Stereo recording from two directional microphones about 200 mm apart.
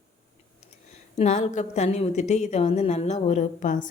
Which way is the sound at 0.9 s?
35° left (ahead or behind).